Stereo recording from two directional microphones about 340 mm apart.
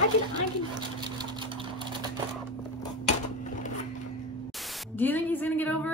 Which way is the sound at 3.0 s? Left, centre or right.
Left.